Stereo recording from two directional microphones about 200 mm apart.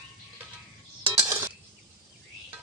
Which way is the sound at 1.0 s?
20° right (ahead or behind).